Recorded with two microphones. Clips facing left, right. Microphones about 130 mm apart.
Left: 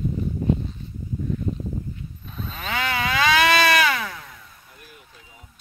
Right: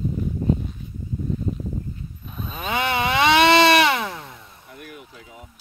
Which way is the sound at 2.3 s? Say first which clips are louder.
Right 3 dB; 15° right (ahead or behind).